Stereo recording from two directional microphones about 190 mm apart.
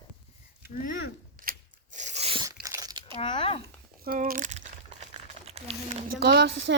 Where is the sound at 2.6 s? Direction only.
20° right (ahead or behind).